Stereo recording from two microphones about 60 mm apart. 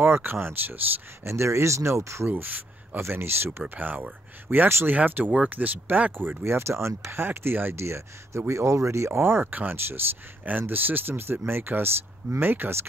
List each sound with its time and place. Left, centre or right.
0.0 s speech: right
1.2 s speech: right
2.2 s speech: right
6.4 s speech: right
7.7 s speech: right
9.2 s speech: right